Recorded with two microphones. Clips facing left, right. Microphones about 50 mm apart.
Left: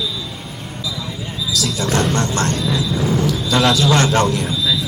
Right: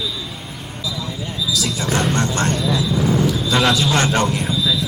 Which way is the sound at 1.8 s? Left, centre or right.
Centre.